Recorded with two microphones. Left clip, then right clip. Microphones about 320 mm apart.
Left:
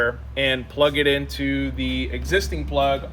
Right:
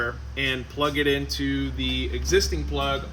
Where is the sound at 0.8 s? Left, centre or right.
Left.